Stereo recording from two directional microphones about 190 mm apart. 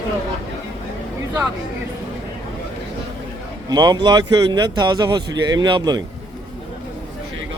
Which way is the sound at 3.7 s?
20° right (ahead or behind).